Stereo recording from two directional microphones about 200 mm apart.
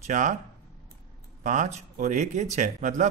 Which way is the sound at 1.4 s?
35° right (ahead or behind).